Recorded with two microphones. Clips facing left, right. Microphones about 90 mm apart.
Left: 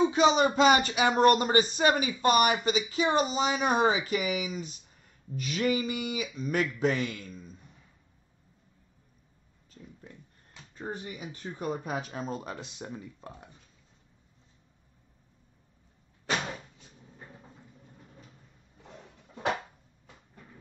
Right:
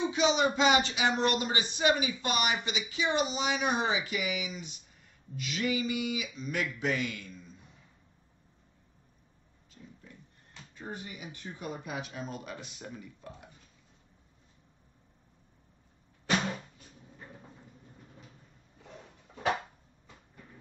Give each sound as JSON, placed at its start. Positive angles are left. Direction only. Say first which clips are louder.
{"t": 0.0, "sound": "speech", "louder": "left 4 dB", "side_deg": 40}
{"t": 10.7, "sound": "speech", "louder": "left 4 dB", "side_deg": 40}